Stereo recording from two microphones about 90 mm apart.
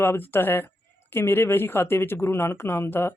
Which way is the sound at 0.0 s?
25° left (ahead or behind).